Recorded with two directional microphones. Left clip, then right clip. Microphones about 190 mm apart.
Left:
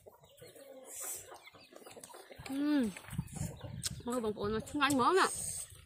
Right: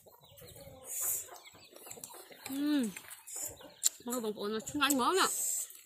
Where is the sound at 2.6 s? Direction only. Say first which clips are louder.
Even; 15° left (ahead or behind).